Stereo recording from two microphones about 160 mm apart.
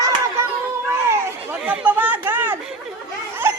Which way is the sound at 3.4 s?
15° right (ahead or behind).